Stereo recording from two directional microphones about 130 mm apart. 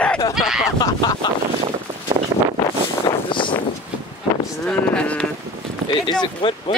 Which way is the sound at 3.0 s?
40° left (ahead or behind).